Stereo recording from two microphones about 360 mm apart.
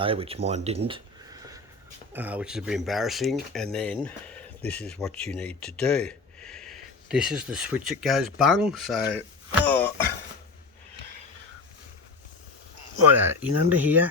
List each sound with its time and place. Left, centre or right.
0.0 s speech: centre
13.1 s speech: centre